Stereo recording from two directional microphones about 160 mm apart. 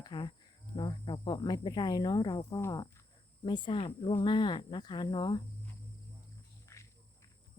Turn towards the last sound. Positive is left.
turn(degrees=15)  # may be behind; listen again after turning